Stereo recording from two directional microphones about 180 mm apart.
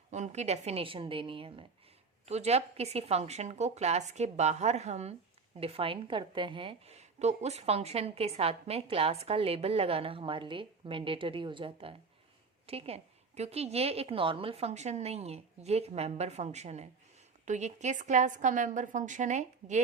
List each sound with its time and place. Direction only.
0.1 s a woman's voice: 40° right (ahead or behind)